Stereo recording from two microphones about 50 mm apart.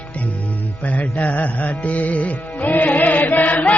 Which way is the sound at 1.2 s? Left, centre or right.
Left.